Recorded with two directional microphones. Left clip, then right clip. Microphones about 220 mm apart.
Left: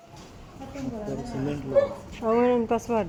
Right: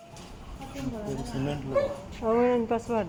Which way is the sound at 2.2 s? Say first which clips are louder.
Left 2 dB; 15° left (ahead or behind).